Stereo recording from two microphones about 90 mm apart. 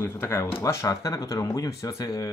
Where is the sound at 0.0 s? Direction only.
30° left (ahead or behind).